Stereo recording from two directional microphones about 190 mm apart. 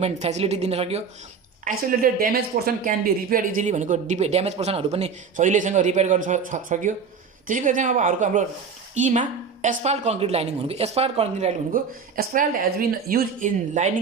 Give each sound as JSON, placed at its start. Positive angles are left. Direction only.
{"t": 0.0, "sound": "speech", "side_deg": -35}
{"t": 2.0, "sound": "speech", "side_deg": -50}